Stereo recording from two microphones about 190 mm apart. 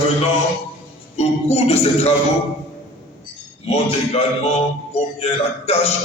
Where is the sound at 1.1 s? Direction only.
35° left (ahead or behind).